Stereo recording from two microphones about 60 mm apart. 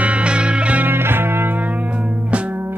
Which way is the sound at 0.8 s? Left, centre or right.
Right.